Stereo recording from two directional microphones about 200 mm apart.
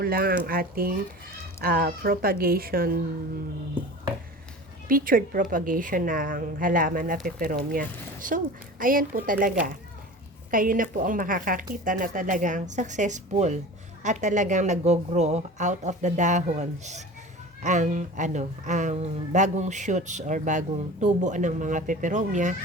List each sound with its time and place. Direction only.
0.0 s a woman's voice: 50° right (ahead or behind)
4.9 s a woman's voice: 45° right (ahead or behind)